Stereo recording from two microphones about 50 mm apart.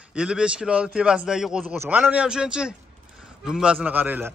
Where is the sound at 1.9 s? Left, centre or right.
Right.